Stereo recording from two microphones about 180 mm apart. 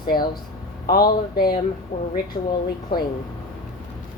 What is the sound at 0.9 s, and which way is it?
Speech, 55° left (ahead or behind).